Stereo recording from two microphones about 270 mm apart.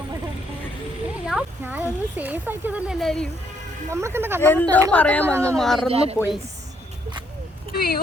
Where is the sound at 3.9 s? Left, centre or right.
Centre.